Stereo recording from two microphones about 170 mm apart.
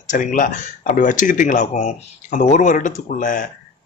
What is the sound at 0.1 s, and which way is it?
Speech, 50° left (ahead or behind).